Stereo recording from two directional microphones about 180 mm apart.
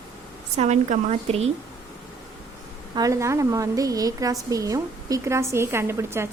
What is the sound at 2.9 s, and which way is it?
A woman's voice, 20° right (ahead or behind).